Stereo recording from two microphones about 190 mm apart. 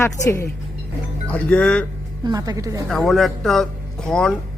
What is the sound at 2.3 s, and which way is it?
Speech, 20° right (ahead or behind).